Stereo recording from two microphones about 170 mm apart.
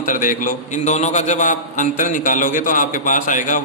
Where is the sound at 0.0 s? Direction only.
50° left (ahead or behind).